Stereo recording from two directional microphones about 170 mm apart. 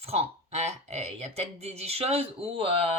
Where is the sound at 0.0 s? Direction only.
40° right (ahead or behind).